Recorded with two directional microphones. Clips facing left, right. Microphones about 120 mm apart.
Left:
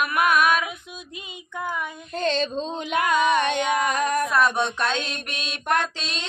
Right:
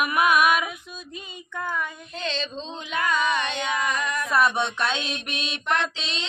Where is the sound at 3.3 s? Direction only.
50° left (ahead or behind).